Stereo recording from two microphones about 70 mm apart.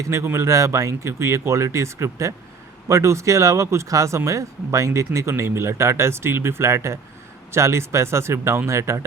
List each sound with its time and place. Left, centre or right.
0.0 s speech: right